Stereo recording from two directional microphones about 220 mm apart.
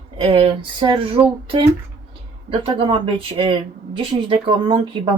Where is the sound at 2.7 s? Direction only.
25° right (ahead or behind).